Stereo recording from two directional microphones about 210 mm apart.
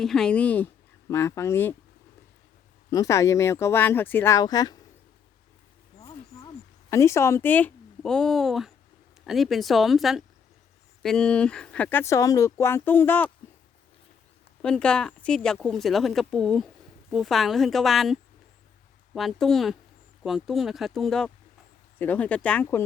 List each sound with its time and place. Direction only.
0.0 s speech: centre (ahead or behind)
2.9 s speech: 15° left (ahead or behind)
6.9 s speech: 15° left (ahead or behind)
14.6 s speech: 5° left (ahead or behind)